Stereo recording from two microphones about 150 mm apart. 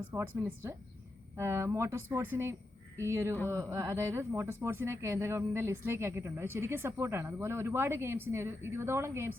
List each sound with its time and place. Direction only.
0.1 s speech: 10° right (ahead or behind)